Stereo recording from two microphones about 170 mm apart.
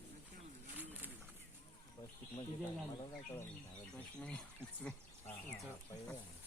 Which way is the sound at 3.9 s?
5° left (ahead or behind).